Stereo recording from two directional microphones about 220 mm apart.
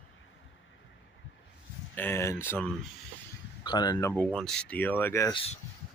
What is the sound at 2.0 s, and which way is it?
Speech, 10° left (ahead or behind).